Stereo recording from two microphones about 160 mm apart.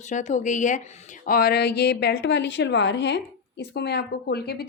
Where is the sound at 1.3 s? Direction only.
75° left (ahead or behind).